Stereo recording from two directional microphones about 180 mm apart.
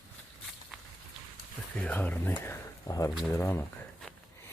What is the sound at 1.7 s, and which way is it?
Speech, 10° left (ahead or behind).